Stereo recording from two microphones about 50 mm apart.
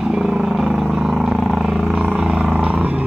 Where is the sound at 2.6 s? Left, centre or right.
Right.